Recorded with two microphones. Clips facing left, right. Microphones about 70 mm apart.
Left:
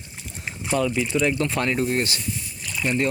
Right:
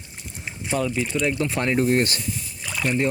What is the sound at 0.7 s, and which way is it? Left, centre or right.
Speech, centre.